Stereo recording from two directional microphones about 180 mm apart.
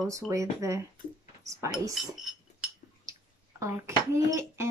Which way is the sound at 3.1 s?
15° right (ahead or behind).